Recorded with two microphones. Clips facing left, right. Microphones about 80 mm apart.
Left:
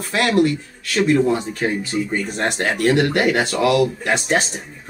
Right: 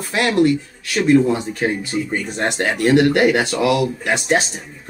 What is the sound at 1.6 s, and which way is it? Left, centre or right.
Speech, centre.